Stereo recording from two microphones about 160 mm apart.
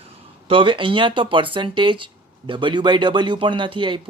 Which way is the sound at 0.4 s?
35° right (ahead or behind).